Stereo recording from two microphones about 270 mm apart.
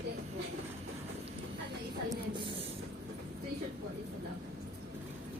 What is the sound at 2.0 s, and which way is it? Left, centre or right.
Spray, centre.